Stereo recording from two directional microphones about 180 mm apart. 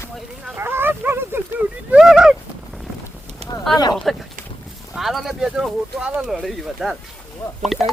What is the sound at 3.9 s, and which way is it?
Speech, centre (ahead or behind).